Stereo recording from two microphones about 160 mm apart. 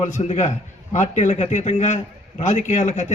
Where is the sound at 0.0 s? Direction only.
45° left (ahead or behind).